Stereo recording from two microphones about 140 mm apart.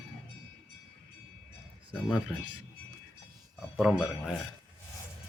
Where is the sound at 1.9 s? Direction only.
5° right (ahead or behind).